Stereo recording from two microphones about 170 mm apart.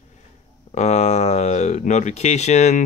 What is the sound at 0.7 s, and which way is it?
Speech, 40° left (ahead or behind).